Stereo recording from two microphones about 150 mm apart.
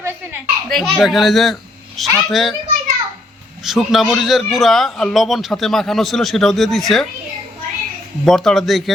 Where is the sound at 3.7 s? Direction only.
Centre (ahead or behind).